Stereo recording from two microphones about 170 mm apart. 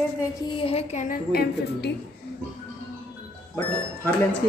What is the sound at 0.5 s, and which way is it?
Speech, 35° left (ahead or behind).